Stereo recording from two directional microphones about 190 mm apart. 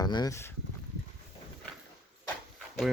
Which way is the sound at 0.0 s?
20° left (ahead or behind).